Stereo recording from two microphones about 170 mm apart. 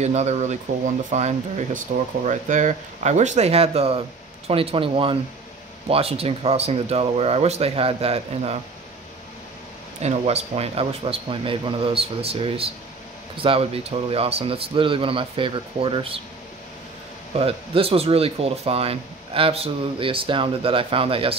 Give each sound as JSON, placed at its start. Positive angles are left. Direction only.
{"t": 0.0, "sound": "speech", "side_deg": -40}
{"t": 10.0, "sound": "speech", "side_deg": -40}
{"t": 17.4, "sound": "speech", "side_deg": -35}